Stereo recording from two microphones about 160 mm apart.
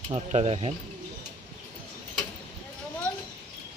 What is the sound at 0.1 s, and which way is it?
Speech, 40° right (ahead or behind).